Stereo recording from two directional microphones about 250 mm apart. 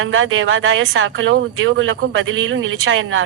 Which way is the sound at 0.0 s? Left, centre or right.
Right.